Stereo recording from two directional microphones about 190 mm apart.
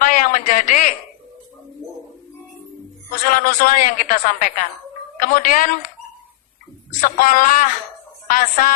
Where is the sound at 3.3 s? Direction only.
45° left (ahead or behind).